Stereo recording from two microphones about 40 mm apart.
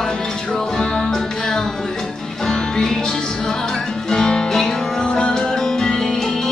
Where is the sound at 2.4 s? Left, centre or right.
Centre.